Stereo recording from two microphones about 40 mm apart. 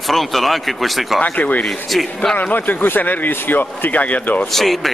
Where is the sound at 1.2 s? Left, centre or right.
Left.